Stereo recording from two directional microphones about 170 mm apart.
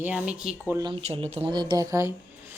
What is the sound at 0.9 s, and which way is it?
Speech, 35° right (ahead or behind).